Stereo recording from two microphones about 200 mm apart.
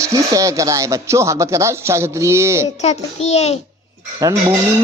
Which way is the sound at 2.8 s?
30° left (ahead or behind).